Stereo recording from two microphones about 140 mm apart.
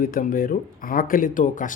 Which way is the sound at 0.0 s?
80° left.